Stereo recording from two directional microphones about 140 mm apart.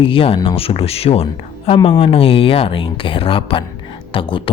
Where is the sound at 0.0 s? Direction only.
40° left (ahead or behind).